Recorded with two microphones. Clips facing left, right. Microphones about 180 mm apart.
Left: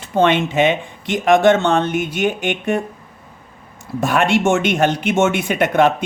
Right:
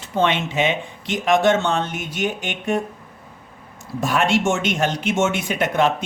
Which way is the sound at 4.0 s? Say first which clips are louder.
Left 3 dB; 60° left (ahead or behind).